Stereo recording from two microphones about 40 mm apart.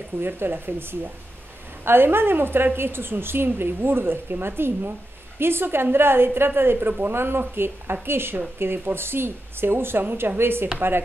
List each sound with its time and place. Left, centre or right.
0.4 s a woman's voice: right